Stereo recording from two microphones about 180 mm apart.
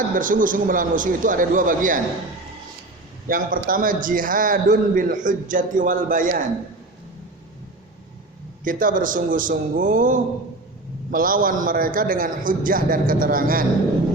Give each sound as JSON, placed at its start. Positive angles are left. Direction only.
{"t": 0.1, "sound": "a man's voice", "side_deg": -45}
{"t": 3.2, "sound": "a man's voice", "side_deg": -50}
{"t": 8.6, "sound": "a man's voice", "side_deg": -50}